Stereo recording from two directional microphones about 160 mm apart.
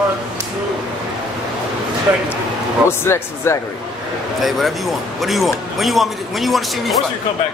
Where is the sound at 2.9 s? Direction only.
15° left (ahead or behind).